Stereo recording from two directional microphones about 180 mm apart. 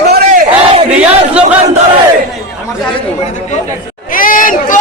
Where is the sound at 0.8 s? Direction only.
5° right (ahead or behind).